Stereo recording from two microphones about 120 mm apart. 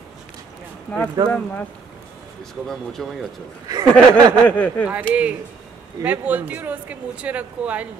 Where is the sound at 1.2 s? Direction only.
35° right (ahead or behind).